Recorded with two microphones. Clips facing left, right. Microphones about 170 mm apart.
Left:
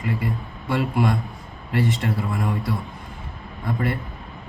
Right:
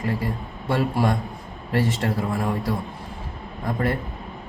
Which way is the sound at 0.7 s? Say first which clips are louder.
Even; 35° right (ahead or behind).